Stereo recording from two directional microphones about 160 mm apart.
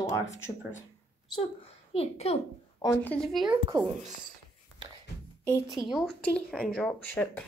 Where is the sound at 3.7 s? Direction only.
20° right (ahead or behind).